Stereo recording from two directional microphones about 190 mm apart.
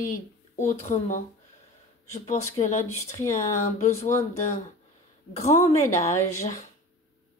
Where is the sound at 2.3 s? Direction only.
40° left (ahead or behind).